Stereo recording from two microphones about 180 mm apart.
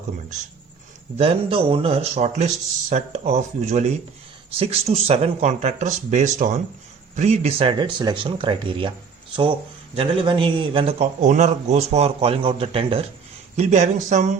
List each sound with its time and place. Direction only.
1.2 s a man's voice: 30° right (ahead or behind)
9.9 s a man's voice: 30° right (ahead or behind)